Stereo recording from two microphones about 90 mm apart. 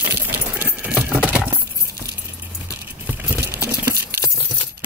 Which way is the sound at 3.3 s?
30° right (ahead or behind).